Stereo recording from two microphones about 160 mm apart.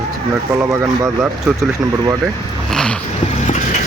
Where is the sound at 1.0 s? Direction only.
5° right (ahead or behind).